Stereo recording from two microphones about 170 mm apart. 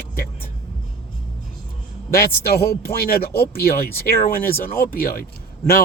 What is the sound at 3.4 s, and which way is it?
Speech, 65° left (ahead or behind).